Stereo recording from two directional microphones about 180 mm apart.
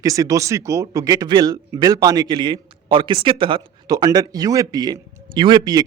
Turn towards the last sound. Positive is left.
turn(degrees=-25)  # may be behind; listen again after turning